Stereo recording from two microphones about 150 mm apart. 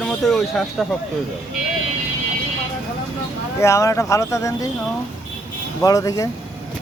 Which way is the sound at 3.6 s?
20° left (ahead or behind).